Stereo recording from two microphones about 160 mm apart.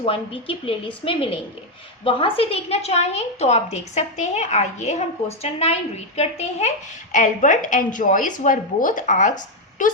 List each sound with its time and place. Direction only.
0.0 s a woman's voice: 35° left (ahead or behind); by 9.3 s 55° left (ahead or behind)